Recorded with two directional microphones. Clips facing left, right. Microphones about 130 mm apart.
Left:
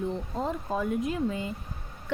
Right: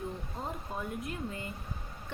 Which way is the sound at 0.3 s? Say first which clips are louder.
Left 10 dB; 90° left.